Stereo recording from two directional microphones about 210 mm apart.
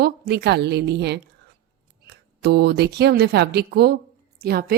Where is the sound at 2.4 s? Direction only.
50° right (ahead or behind).